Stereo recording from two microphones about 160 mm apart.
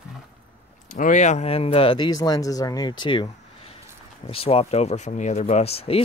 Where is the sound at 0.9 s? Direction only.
50° left (ahead or behind); by 3.3 s 30° left (ahead or behind).